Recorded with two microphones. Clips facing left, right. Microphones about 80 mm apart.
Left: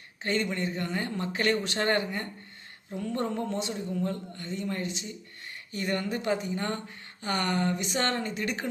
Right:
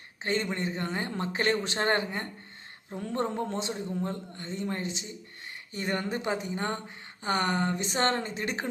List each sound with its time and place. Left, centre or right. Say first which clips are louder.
0.2 s speech: left 1 dB; right